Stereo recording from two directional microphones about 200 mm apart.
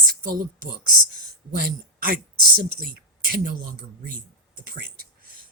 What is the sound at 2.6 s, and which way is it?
Speech, 45° right (ahead or behind).